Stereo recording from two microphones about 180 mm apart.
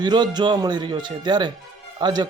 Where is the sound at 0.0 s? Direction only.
25° right (ahead or behind).